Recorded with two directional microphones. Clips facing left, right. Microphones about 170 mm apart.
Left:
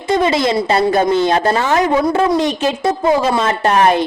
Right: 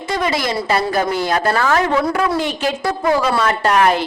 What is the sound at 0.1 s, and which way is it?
A woman's voice, 25° left (ahead or behind).